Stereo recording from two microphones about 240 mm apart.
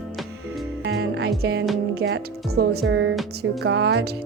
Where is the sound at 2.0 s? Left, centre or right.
Right.